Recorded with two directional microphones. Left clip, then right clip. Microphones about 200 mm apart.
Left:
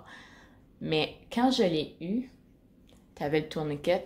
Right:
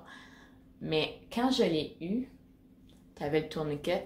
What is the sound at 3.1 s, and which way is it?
Speech, 30° left (ahead or behind).